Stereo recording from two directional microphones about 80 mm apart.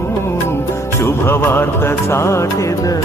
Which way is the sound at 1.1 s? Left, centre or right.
Left.